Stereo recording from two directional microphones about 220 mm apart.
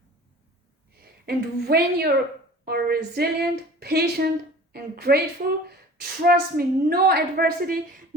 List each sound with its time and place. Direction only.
1.2 s a woman's voice: 45° right (ahead or behind)